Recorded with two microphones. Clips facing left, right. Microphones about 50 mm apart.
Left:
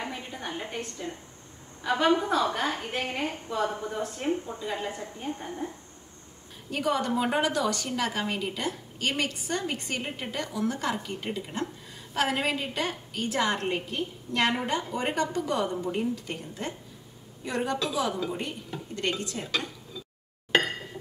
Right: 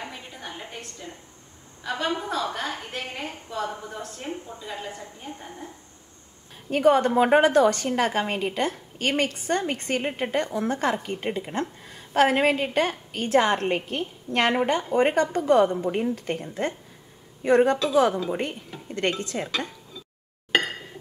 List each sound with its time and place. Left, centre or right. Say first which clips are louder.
0.1 s a sound: left 3 dB; centre
1.8 s a woman's voice: left 4 dB; centre
6.7 s a woman's voice: right 8 dB; right